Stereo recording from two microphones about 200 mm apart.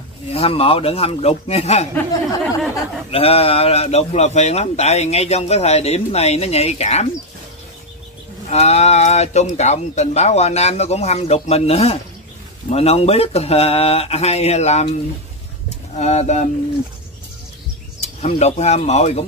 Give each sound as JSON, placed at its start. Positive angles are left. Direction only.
{"t": 0.3, "sound": "speech", "side_deg": 30}
{"t": 3.1, "sound": "speech", "side_deg": 30}
{"t": 8.5, "sound": "speech", "side_deg": 30}
{"t": 16.0, "sound": "speech", "side_deg": 35}
{"t": 18.0, "sound": "speech", "side_deg": 35}